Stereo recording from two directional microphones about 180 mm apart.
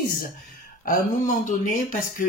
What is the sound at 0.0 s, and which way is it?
Speech, 50° left (ahead or behind).